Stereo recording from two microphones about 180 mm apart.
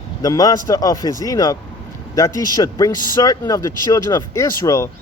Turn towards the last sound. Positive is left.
turn(degrees=15)  # may be behind; listen again after turning